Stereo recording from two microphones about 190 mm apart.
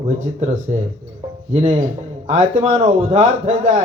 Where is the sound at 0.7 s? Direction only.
35° right (ahead or behind).